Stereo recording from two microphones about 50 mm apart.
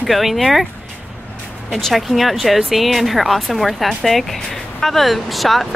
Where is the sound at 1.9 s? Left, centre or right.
Centre.